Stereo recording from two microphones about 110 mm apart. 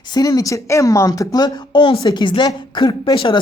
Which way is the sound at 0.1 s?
35° left (ahead or behind).